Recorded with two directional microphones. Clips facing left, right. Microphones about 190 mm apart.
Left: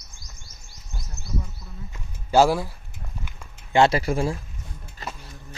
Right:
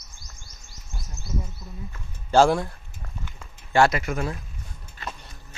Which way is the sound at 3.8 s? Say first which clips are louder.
Left 4 dB; 30° left (ahead or behind).